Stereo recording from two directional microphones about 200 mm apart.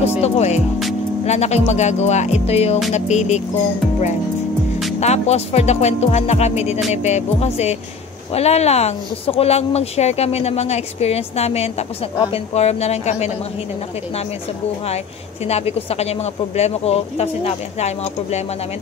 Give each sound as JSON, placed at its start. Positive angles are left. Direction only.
{"t": 0.0, "sound": "speech", "side_deg": 30}
{"t": 5.0, "sound": "speech", "side_deg": 35}
{"t": 15.4, "sound": "speech", "side_deg": 30}